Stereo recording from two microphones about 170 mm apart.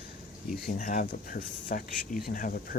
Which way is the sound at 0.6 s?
55° left (ahead or behind).